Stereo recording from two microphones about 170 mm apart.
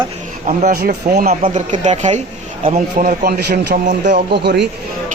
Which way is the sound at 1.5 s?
45° right (ahead or behind).